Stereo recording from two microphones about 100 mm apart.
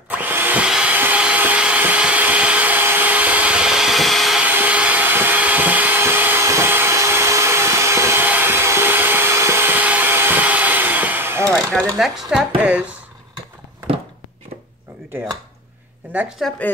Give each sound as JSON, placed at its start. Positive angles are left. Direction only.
{"t": 0.2, "sound": "drill", "side_deg": -20}
{"t": 0.7, "sound": "a sound", "side_deg": -10}
{"t": 4.4, "sound": "vacuum cleaner", "side_deg": -15}
{"t": 11.5, "sound": "a sound", "side_deg": 5}
{"t": 12.6, "sound": "a woman's voice", "side_deg": -15}
{"t": 16.1, "sound": "a woman's voice", "side_deg": -10}